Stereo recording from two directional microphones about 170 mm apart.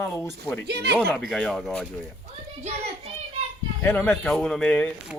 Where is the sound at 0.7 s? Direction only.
70° right (ahead or behind).